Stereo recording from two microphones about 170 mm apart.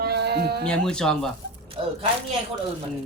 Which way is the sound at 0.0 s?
75° right (ahead or behind).